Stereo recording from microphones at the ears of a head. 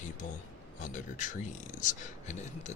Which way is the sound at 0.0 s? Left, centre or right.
Left.